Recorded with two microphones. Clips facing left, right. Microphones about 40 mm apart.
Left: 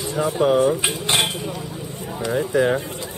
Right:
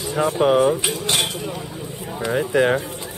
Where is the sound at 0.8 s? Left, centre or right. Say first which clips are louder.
Left 1 dB; left.